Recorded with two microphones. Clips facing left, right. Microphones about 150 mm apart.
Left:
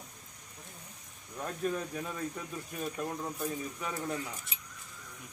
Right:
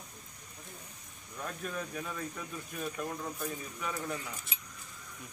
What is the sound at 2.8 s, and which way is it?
Speech, 20° left (ahead or behind).